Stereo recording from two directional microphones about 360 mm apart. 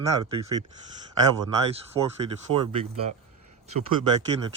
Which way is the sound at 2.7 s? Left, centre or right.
Centre.